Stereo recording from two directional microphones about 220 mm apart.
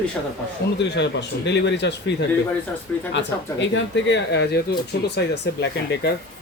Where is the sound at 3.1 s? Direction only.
55° left (ahead or behind).